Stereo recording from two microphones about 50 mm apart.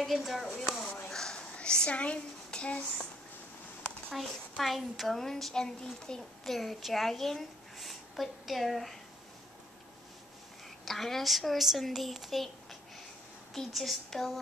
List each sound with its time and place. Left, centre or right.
0.0 s a woman's voice: centre
0.7 s a sound: centre
1.1 s speech: centre
4.1 s a woman's voice: centre
10.9 s a woman's voice: centre
13.7 s a woman's voice: centre